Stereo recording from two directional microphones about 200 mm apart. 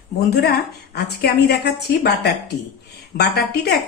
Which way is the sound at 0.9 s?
55° left (ahead or behind).